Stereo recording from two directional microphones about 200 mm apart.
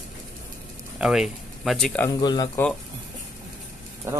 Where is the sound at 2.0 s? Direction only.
20° left (ahead or behind).